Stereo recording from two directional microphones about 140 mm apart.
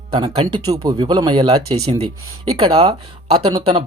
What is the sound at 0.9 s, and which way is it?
Speech, 35° right (ahead or behind).